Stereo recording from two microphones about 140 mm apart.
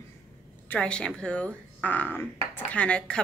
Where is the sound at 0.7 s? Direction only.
5° left (ahead or behind).